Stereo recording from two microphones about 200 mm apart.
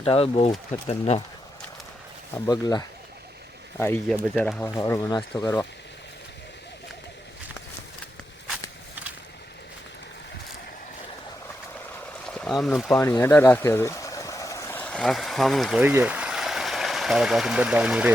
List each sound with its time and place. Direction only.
0.0 s speech: 30° left (ahead or behind)
2.5 s speech: 20° left (ahead or behind)
4.7 s speech: 20° left (ahead or behind)
12.2 s speech: 5° left (ahead or behind)